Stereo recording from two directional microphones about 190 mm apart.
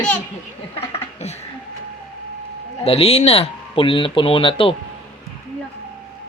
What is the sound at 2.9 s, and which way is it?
A man's voice, 30° left (ahead or behind).